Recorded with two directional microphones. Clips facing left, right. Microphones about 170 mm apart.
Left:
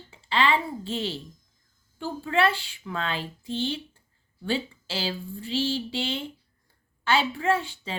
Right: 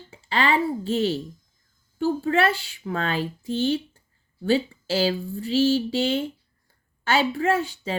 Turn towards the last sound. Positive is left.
turn(degrees=-40)  # may be behind; listen again after turning